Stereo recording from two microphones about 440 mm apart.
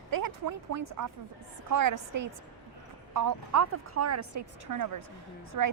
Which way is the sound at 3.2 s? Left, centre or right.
Right.